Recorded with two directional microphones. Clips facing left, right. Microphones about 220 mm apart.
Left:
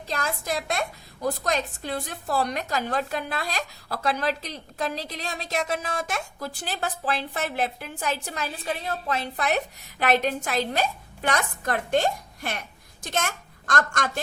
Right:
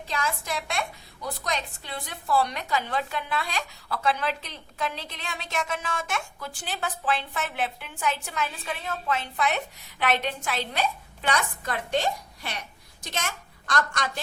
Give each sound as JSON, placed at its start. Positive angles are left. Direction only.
{"t": 0.1, "sound": "a woman's voice", "side_deg": 40}